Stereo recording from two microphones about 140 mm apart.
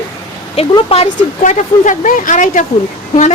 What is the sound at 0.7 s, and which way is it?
Speech, 45° left (ahead or behind).